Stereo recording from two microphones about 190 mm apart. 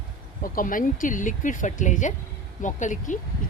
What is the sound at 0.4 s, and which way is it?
Speech, 45° left (ahead or behind).